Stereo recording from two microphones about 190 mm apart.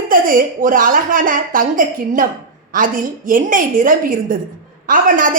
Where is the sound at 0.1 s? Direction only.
45° right (ahead or behind).